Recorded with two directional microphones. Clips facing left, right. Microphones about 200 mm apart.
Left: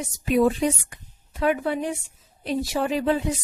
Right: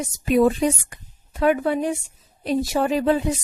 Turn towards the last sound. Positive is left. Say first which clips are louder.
# right 3 dB
turn(degrees=-45)  # may be behind; listen again after turning